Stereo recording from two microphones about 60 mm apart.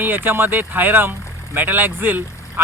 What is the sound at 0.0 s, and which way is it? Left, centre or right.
Speech, right.